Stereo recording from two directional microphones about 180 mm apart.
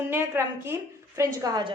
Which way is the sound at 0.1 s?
15° right (ahead or behind).